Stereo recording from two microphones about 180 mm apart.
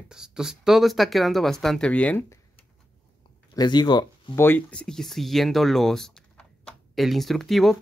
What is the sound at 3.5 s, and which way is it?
Speech, 25° left (ahead or behind).